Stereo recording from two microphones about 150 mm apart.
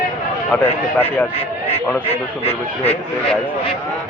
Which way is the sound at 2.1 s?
40° left (ahead or behind).